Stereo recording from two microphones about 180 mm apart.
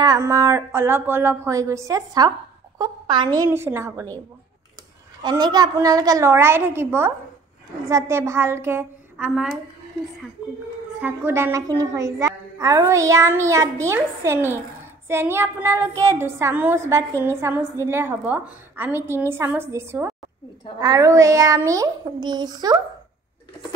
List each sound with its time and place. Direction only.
0.0 s a woman's voice: 20° right (ahead or behind)
3.3 s a woman's voice: 15° right (ahead or behind)
5.2 s a woman's voice: 20° right (ahead or behind)
9.3 s a woman's voice: centre (ahead or behind)
11.0 s a woman's voice: 10° right (ahead or behind)